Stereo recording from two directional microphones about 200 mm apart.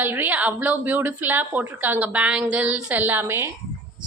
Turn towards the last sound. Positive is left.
turn(degrees=-10)  # may be behind; listen again after turning